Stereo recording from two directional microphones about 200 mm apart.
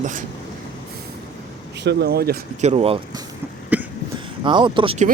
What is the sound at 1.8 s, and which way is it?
Speech, 55° right (ahead or behind).